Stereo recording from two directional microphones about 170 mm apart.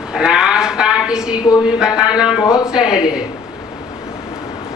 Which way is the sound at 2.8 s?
20° left (ahead or behind).